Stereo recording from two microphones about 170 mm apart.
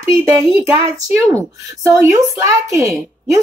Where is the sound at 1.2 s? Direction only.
20° right (ahead or behind).